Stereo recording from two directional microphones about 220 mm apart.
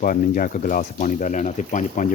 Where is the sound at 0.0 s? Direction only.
40° left (ahead or behind).